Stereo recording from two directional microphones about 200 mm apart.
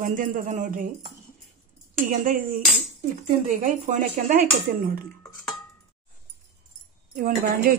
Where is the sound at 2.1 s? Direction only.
45° right (ahead or behind).